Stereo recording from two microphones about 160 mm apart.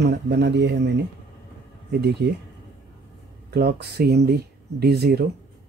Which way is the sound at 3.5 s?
85° right.